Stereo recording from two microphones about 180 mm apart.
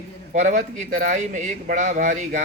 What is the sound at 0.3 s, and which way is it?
A man's voice, 45° right (ahead or behind).